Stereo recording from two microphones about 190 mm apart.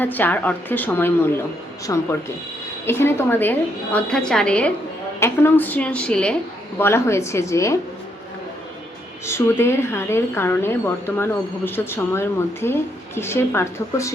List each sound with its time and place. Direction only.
0.0 s speech: 10° left (ahead or behind)
9.2 s speech: 15° left (ahead or behind)